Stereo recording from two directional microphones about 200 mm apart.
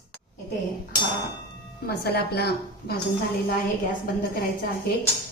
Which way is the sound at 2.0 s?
55° left (ahead or behind).